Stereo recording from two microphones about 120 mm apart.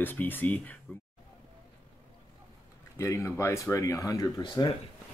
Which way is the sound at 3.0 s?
20° left (ahead or behind).